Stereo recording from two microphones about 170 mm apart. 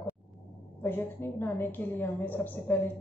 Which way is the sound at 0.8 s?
10° left (ahead or behind).